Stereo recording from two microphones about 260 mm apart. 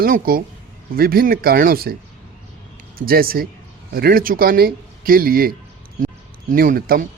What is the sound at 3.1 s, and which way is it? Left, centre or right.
A man's voice, right.